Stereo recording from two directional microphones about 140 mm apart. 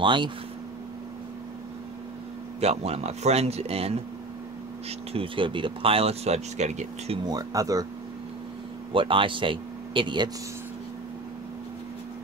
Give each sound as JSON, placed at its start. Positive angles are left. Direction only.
{"t": 0.0, "sound": "speech", "side_deg": -35}
{"t": 2.6, "sound": "speech", "side_deg": -45}
{"t": 7.2, "sound": "speech", "side_deg": -25}
{"t": 8.9, "sound": "speech", "side_deg": -40}